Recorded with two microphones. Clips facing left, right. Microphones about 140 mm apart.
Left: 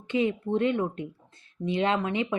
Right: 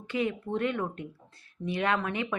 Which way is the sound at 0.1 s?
20° left (ahead or behind).